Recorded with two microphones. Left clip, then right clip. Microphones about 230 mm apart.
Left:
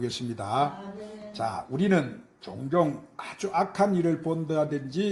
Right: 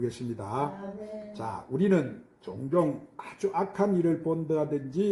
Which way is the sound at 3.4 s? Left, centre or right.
Left.